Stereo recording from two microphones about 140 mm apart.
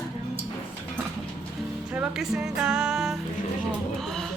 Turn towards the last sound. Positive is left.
turn(degrees=-5)  # may be behind; listen again after turning